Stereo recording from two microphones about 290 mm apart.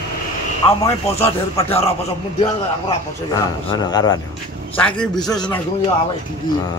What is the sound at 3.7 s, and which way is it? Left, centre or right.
Speech, centre.